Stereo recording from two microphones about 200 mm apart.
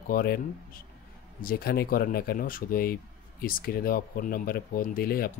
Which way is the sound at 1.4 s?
45° left (ahead or behind).